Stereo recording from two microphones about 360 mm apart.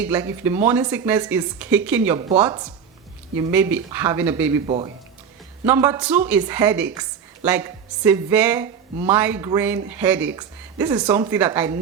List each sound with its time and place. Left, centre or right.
0.0 s a woman's voice: centre
4.6 s a woman's voice: centre